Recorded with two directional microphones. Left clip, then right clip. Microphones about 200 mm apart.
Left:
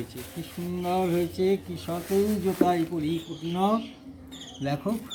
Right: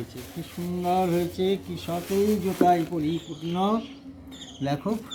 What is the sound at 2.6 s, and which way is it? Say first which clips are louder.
Speech: right 4 dB; 25° right (ahead or behind).